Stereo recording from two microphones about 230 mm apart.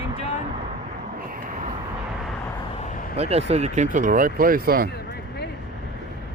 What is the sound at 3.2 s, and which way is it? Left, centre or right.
Speech, right.